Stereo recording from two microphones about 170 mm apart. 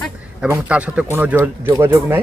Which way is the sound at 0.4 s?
10° right (ahead or behind).